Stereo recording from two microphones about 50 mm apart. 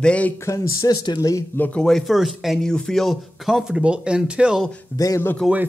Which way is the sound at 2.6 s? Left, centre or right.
Centre.